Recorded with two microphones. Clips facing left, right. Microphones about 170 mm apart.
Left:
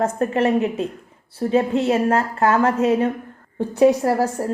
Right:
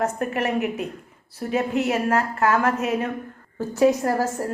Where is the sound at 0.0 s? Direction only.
30° left (ahead or behind).